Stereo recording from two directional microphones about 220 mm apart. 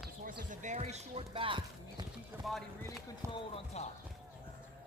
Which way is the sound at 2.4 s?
Centre (ahead or behind).